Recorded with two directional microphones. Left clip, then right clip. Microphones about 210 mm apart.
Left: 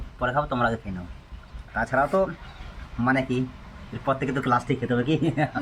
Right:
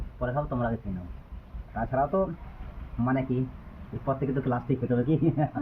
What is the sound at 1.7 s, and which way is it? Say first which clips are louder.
Speech: left 4 dB; 20° left (ahead or behind).